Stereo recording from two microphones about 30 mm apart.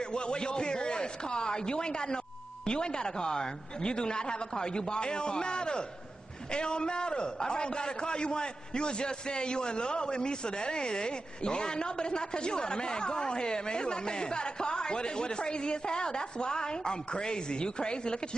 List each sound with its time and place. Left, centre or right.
0.0 s a man's voice: left